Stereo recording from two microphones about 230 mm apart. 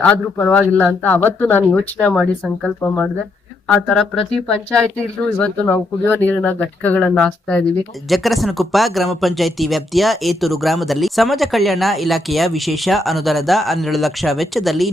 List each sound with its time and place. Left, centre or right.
0.0 s speech: centre